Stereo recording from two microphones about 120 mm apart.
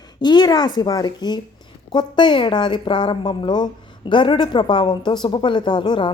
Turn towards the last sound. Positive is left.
turn(degrees=40)  # may be behind; listen again after turning